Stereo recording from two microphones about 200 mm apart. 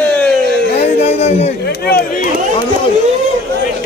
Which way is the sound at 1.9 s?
50° left (ahead or behind).